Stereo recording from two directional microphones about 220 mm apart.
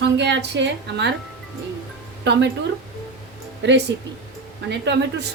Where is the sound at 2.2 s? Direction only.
50° right (ahead or behind).